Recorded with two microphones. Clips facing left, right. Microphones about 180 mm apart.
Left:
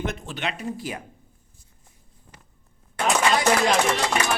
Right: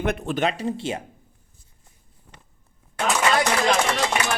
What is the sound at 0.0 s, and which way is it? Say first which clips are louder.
Speech: right 6 dB; 60° right (ahead or behind).